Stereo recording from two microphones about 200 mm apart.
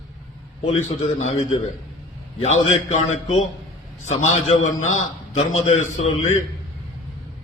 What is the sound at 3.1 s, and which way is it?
Speech, 90° left.